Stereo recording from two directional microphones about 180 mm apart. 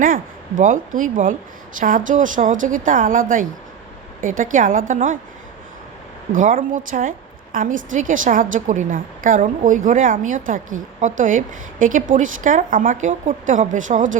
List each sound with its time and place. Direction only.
0.0 s a woman's voice: 50° right (ahead or behind)
6.3 s a woman's voice: 45° right (ahead or behind)